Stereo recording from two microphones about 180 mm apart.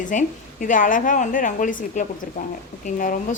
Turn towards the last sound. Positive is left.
turn(degrees=45)  # may be behind; listen again after turning